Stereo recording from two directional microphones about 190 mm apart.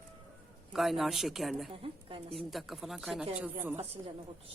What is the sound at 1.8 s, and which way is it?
Speech, 30° right (ahead or behind).